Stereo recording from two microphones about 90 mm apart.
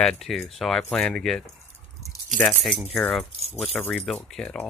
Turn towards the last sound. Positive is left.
turn(degrees=10)  # may be behind; listen again after turning